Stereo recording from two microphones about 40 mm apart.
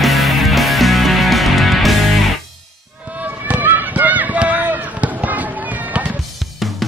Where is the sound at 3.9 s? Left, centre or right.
Right.